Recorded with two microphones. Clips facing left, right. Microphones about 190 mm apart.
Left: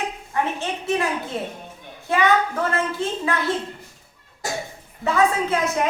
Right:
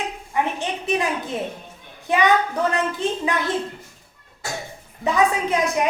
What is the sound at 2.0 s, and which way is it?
A woman's voice, 15° right (ahead or behind).